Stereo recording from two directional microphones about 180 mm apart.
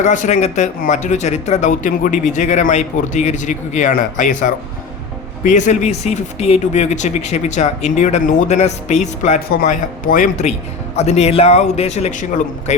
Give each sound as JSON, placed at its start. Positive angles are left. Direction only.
{"t": 0.0, "sound": "speech", "side_deg": 45}
{"t": 9.5, "sound": "speech", "side_deg": 55}